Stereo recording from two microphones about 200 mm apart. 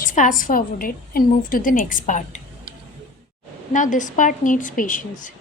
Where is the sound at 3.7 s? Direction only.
40° left (ahead or behind).